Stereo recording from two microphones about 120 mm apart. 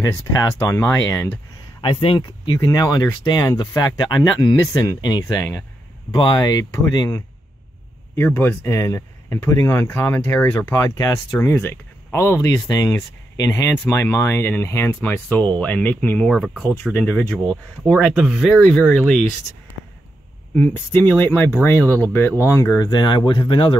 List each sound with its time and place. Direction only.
0.0 s speech: 25° left (ahead or behind)
1.8 s speech: 45° left (ahead or behind); by 7.2 s 30° left (ahead or behind)
8.2 s speech: 20° left (ahead or behind)
11.3 s speech: 20° left (ahead or behind); by 16.7 s centre (ahead or behind)
16.7 s speech: 15° left (ahead or behind); by 18.6 s 5° right (ahead or behind)
18.7 s speech: 10° left (ahead or behind)
20.5 s speech: 15° left (ahead or behind)
22.8 s speech: 35° left (ahead or behind)